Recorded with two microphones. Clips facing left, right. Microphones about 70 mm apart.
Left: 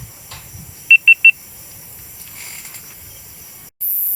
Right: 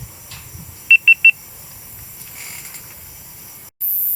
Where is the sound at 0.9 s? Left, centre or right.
Centre.